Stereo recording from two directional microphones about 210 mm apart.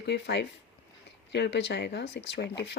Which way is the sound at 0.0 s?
55° left (ahead or behind).